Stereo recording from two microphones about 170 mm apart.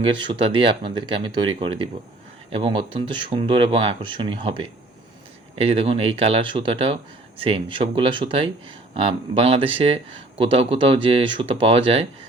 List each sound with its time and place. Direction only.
0.0 s speech: 30° right (ahead or behind)